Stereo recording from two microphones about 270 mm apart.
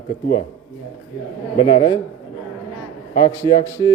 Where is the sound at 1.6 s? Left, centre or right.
Centre.